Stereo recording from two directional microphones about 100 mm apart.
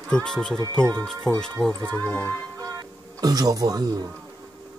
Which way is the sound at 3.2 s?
40° right (ahead or behind).